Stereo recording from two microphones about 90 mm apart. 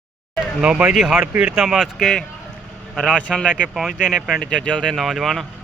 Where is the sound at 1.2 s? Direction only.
15° right (ahead or behind); by 2.2 s centre (ahead or behind).